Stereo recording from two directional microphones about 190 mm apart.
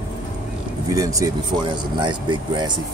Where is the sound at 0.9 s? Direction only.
20° right (ahead or behind).